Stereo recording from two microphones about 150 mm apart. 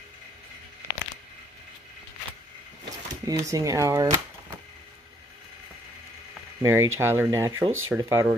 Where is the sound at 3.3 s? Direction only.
25° right (ahead or behind).